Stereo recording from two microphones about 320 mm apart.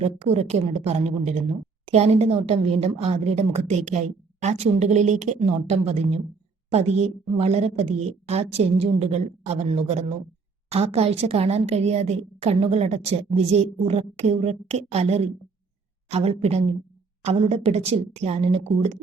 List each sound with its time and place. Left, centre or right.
0.0 s a woman's voice: centre